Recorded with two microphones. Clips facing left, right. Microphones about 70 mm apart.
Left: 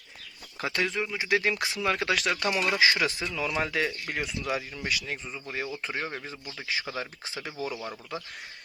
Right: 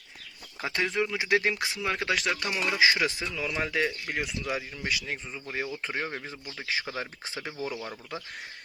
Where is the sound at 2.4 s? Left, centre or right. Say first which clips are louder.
Left 1 dB; centre.